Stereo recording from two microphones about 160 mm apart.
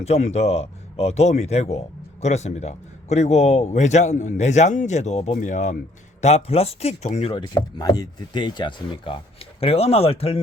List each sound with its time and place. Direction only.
0.0 s a man's voice: 45° left (ahead or behind)
7.4 s speech: 25° left (ahead or behind)